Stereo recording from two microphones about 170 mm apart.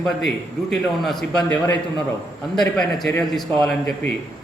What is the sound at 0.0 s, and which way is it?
A man's voice, centre (ahead or behind).